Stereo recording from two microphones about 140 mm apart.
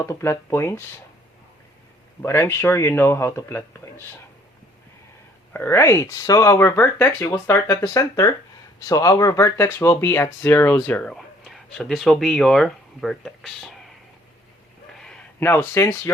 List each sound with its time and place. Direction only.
0.0 s speech: 20° left (ahead or behind)
2.2 s speech: 15° left (ahead or behind)
5.5 s speech: 20° left (ahead or behind); by 13.7 s centre (ahead or behind)
14.9 s a sound: 5° left (ahead or behind)
15.4 s speech: 15° left (ahead or behind)